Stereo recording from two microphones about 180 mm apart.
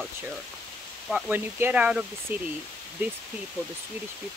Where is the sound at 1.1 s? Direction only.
10° right (ahead or behind).